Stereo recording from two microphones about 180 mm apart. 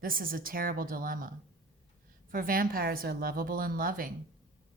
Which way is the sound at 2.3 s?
50° right (ahead or behind).